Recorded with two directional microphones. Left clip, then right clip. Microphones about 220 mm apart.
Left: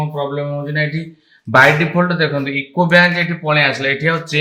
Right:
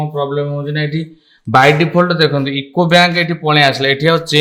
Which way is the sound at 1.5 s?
60° right (ahead or behind).